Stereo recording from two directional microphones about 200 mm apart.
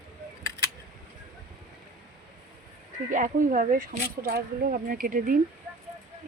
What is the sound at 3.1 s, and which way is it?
Speech, 40° right (ahead or behind).